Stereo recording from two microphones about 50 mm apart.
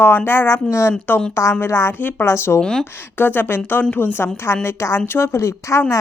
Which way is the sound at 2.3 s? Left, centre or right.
Left.